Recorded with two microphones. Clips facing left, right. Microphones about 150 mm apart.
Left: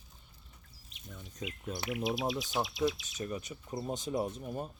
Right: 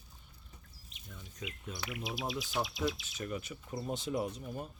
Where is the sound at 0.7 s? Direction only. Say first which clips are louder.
Left 4 dB; centre (ahead or behind).